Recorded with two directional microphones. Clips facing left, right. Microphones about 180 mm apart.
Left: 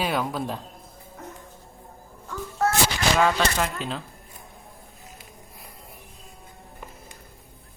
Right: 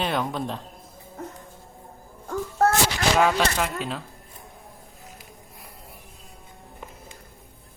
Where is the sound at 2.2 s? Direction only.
50° right (ahead or behind).